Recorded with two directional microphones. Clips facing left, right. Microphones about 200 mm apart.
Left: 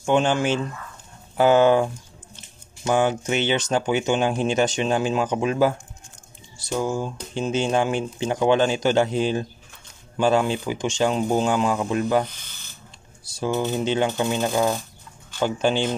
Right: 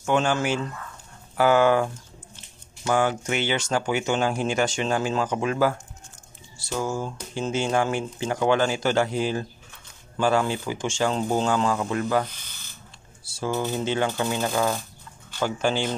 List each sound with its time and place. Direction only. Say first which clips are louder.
0.0 s speech: left 3 dB; 20° left (ahead or behind)